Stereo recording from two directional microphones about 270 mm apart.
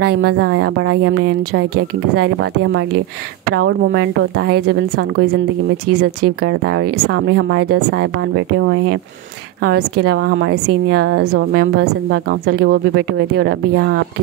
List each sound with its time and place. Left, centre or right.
0.2 s speech: right
2.1 s speech: right
11.2 s a woman's voice: right